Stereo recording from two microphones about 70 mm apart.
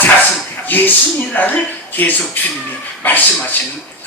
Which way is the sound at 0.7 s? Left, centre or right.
Left.